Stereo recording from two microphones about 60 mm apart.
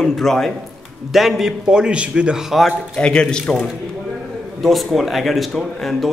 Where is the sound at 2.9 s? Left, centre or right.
Centre.